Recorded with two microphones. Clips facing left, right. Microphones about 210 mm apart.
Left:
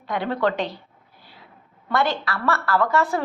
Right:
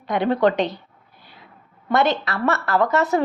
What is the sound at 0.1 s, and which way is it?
Speech, 20° right (ahead or behind).